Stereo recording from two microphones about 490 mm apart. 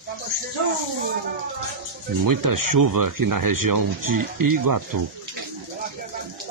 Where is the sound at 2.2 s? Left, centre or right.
Right.